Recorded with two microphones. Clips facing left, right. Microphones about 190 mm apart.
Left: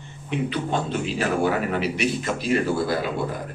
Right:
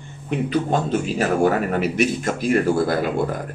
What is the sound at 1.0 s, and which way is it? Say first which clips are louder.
Speech: right 4 dB; 45° right (ahead or behind).